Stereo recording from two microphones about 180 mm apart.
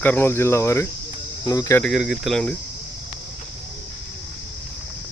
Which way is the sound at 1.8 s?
Centre (ahead or behind).